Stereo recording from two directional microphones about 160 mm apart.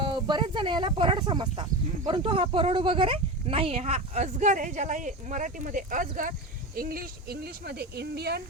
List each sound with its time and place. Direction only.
0.0 s speech: 30° right (ahead or behind); by 8.4 s 90° right